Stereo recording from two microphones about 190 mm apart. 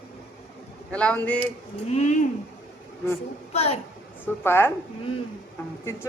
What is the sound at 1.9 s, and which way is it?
Speech, 40° left (ahead or behind).